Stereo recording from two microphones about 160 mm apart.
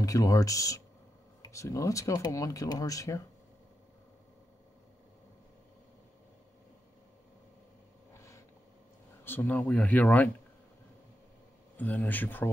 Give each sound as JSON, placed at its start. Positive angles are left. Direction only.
{"t": 0.0, "sound": "speech", "side_deg": 20}
{"t": 8.1, "sound": "a sound", "side_deg": 20}
{"t": 9.2, "sound": "speech", "side_deg": 10}
{"t": 11.7, "sound": "speech", "side_deg": 10}